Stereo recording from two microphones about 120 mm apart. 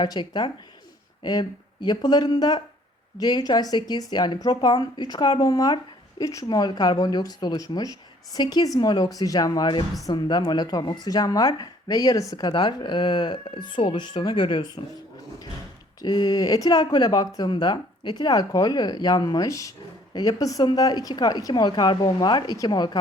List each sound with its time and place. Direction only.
0.0 s speech: 40° left (ahead or behind)
12.5 s speech: 40° left (ahead or behind)
16.0 s speech: 35° left (ahead or behind)